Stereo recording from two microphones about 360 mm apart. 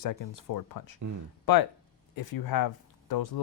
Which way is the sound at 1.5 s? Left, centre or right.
Left.